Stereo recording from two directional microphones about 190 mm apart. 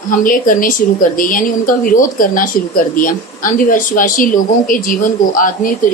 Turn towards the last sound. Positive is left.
turn(degrees=45)  # may be behind; listen again after turning